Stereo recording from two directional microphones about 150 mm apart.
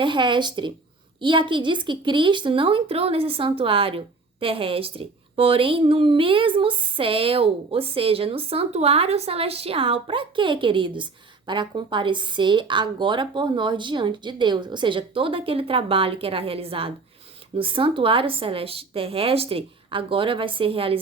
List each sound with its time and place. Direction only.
0.0 s a woman's voice: 30° right (ahead or behind)